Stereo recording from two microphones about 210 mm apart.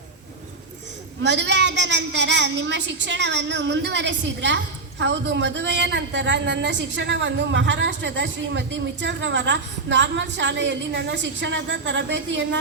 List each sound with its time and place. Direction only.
1.2 s a woman's voice: 55° right (ahead or behind)